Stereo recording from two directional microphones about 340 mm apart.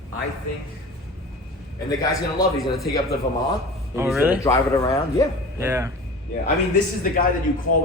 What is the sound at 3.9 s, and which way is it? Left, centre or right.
Speech, centre.